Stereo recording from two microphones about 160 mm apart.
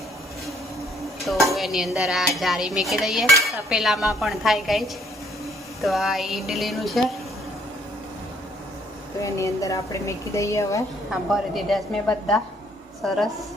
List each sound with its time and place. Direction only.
1.5 s dishes: centre (ahead or behind)
9.2 s a woman's voice: 20° left (ahead or behind)
11.1 s dishes: centre (ahead or behind)